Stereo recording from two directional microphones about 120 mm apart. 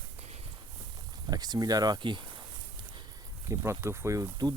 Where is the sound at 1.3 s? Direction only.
35° right (ahead or behind).